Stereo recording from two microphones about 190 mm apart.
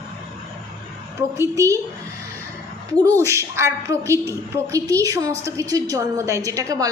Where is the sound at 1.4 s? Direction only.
15° right (ahead or behind).